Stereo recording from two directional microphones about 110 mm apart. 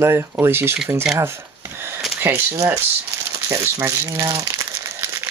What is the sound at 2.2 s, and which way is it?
Speech, 20° right (ahead or behind).